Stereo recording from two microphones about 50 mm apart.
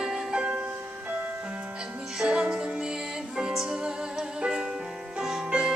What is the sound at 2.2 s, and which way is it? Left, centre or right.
Music, centre.